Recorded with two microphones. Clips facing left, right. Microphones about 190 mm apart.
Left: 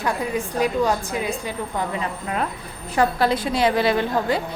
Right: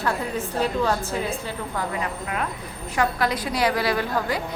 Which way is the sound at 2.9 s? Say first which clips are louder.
Left 4 dB; 30° left (ahead or behind).